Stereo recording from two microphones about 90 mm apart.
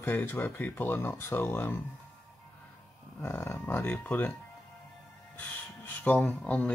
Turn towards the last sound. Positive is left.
turn(degrees=10)  # may be behind; listen again after turning